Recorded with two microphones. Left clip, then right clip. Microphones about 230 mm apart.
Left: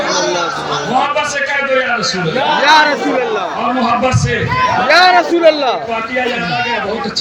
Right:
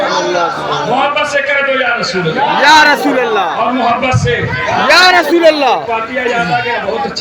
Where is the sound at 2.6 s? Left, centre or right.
Centre.